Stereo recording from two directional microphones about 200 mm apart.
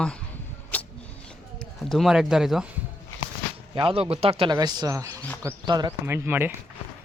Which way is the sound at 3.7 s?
25° right (ahead or behind).